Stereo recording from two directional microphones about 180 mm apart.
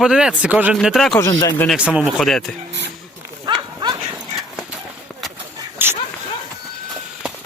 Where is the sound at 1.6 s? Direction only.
5° right (ahead or behind).